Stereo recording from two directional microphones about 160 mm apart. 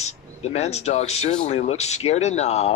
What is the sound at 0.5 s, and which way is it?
Speech, 40° left (ahead or behind).